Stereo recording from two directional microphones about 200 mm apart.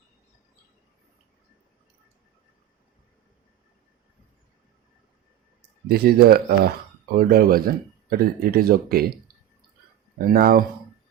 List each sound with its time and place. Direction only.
5.9 s speech: 50° right (ahead or behind)